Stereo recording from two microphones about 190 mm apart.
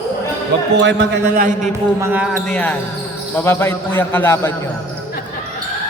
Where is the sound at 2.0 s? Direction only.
5° right (ahead or behind); by 4.5 s 10° left (ahead or behind).